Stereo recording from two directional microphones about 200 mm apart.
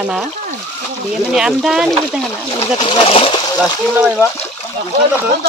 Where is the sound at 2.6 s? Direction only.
25° left (ahead or behind).